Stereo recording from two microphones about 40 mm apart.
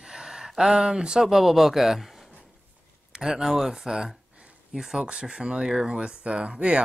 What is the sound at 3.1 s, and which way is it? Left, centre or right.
Speech, centre.